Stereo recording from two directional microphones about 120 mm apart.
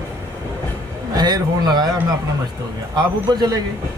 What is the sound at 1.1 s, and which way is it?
A man's voice, 35° right (ahead or behind).